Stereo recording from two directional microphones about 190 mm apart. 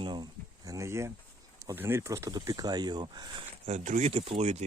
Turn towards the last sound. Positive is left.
turn(degrees=-35)  # may be behind; listen again after turning